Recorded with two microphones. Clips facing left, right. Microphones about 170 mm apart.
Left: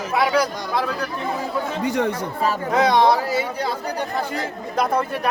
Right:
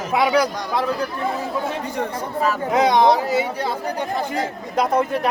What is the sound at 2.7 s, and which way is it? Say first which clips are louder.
Speech: right 1 dB; 20° right (ahead or behind).